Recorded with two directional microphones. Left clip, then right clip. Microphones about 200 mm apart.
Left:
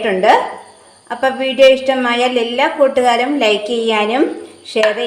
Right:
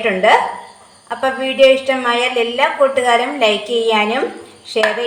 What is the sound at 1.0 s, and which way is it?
A woman's voice, 45° left (ahead or behind).